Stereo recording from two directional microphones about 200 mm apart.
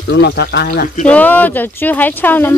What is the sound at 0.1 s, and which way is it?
Speech, 55° left (ahead or behind).